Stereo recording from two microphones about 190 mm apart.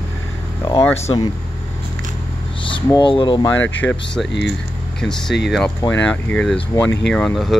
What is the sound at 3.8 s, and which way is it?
Speech, 10° left (ahead or behind).